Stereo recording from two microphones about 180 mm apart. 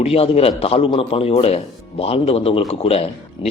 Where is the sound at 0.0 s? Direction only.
35° left (ahead or behind).